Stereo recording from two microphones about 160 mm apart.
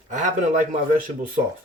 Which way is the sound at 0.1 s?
50° right (ahead or behind).